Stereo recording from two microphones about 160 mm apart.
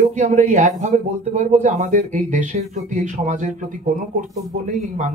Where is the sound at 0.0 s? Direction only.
50° right (ahead or behind).